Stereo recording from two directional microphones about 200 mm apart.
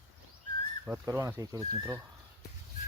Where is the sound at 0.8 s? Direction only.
10° right (ahead or behind).